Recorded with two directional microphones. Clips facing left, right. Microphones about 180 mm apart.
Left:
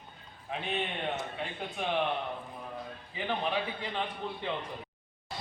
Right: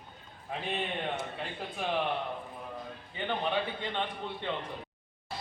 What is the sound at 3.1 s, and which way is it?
A man's voice, 5° left (ahead or behind).